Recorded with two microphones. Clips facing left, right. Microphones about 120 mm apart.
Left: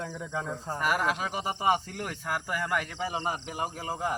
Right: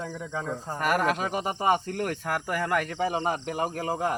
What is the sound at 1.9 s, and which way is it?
Speech, 50° right (ahead or behind).